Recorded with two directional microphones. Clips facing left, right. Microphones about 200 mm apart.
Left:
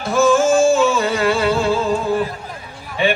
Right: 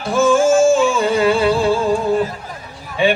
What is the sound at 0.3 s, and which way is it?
Music, 10° right (ahead or behind).